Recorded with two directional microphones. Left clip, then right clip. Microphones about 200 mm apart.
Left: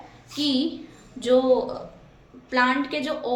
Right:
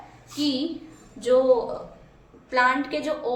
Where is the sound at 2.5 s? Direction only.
20° left (ahead or behind).